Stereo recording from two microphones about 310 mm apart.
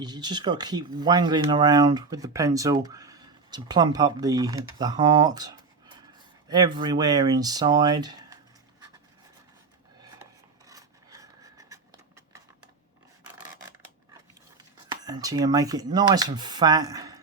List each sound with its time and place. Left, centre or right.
0.0 s speech: centre
10.7 s a sound: centre
15.0 s speech: centre